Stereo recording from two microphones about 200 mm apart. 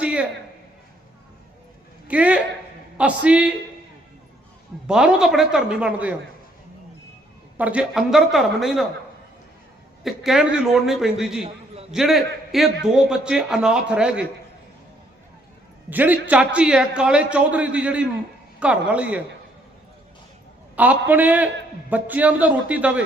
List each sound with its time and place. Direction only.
0.0 s a sound: 5° right (ahead or behind)
2.0 s a man's voice: 5° right (ahead or behind)
4.9 s a man's voice: 5° right (ahead or behind)
7.5 s a man's voice: 5° right (ahead or behind)
10.0 s a man's voice: centre (ahead or behind)
11.4 s a sound: 30° right (ahead or behind)
11.9 s a man's voice: centre (ahead or behind)
15.9 s a man's voice: 10° right (ahead or behind)
20.7 s a man's voice: 10° right (ahead or behind)